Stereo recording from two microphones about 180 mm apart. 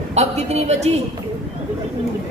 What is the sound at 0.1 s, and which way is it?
Speech, 40° right (ahead or behind).